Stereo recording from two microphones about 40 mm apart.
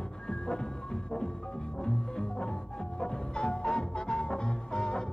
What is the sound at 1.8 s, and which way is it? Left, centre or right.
Music, left.